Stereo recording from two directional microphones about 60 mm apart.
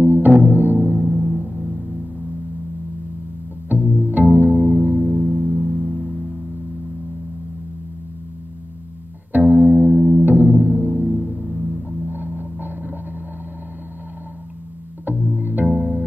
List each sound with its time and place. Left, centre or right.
0.0 s music: right
3.6 s music: right
9.5 s music: right
11.5 s hum: centre
12.0 s music: right
15.3 s music: right